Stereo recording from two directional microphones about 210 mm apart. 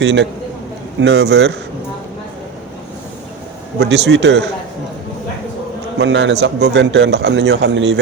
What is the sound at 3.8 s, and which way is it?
Speech, 55° right (ahead or behind).